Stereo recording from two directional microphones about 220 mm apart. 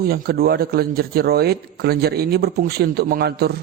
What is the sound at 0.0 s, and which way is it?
A man's voice, 45° right (ahead or behind).